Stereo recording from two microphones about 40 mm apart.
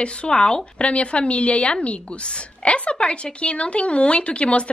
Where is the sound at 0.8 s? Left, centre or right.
Left.